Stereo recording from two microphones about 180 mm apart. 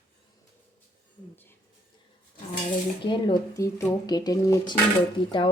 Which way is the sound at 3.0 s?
25° left (ahead or behind).